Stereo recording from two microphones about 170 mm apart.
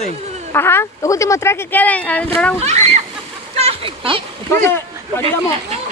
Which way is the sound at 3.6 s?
35° right (ahead or behind).